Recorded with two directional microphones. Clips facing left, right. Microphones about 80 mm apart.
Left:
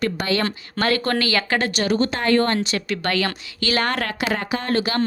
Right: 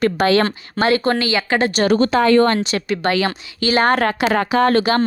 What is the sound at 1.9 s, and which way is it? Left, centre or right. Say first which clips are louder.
Speech: right 5 dB; right.